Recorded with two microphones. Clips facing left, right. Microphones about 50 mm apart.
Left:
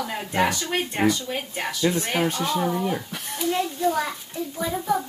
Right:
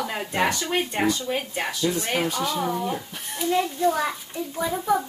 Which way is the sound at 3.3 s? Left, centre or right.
Centre.